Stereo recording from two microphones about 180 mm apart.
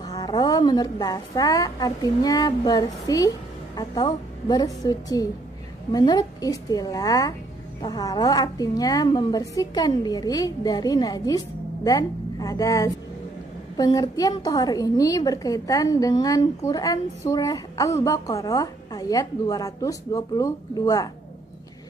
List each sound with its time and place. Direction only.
0.0 s a woman's voice: 20° left (ahead or behind)